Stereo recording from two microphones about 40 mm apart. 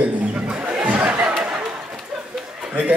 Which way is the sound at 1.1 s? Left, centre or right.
Right.